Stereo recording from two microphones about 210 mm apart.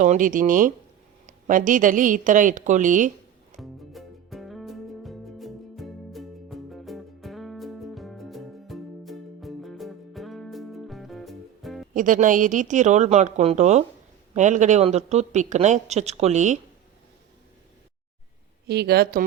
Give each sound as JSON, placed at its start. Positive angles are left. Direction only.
{"t": 0.0, "sound": "speech", "side_deg": -40}
{"t": 3.6, "sound": "music", "side_deg": 0}
{"t": 11.9, "sound": "speech", "side_deg": -40}
{"t": 18.7, "sound": "speech", "side_deg": -50}